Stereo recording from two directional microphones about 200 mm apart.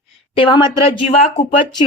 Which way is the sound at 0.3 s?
25° left (ahead or behind).